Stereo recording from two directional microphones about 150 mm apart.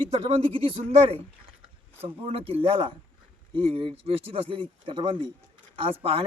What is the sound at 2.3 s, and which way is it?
A man's voice, 40° right (ahead or behind).